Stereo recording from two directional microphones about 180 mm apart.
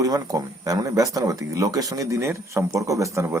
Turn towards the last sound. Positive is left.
turn(degrees=-15)  # may be behind; listen again after turning